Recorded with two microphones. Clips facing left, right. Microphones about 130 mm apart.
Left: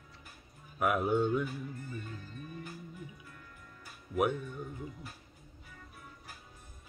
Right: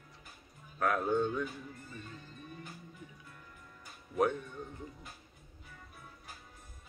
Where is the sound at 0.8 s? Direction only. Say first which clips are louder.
Left 1 dB; 10° left (ahead or behind).